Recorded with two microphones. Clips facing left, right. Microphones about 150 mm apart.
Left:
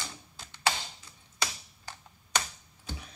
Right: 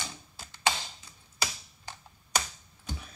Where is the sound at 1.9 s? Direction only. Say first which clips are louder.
Right 1 dB; 20° right (ahead or behind).